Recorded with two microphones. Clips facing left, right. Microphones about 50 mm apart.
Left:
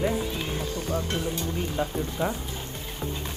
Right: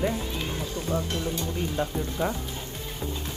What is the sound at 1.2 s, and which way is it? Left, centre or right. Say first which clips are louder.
Speech: even; centre.